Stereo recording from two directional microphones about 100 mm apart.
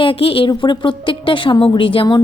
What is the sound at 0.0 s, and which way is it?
A woman's voice, 65° left (ahead or behind).